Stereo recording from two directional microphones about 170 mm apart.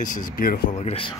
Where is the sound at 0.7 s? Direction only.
35° left (ahead or behind).